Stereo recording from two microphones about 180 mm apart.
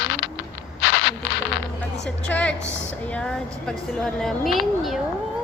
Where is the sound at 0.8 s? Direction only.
90° left.